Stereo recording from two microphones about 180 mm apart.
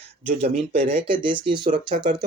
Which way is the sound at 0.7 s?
30° right (ahead or behind).